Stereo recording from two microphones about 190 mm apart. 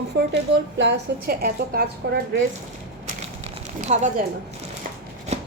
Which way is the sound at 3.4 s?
40° right (ahead or behind).